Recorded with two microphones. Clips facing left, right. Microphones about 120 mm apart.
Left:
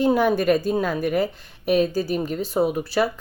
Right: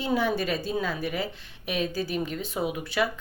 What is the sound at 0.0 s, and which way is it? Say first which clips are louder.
A woman's voice: left 7 dB; 50° left (ahead or behind).